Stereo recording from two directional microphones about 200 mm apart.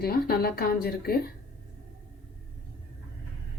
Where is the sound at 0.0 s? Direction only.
50° left (ahead or behind).